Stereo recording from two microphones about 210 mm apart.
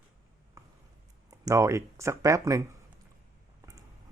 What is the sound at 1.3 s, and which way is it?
A man's voice, 15° right (ahead or behind).